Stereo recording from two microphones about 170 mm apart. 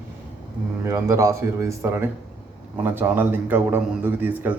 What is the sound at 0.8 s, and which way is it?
Speech, 15° right (ahead or behind).